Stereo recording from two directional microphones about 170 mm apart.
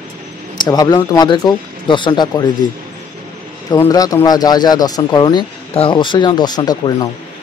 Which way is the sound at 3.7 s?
20° left (ahead or behind).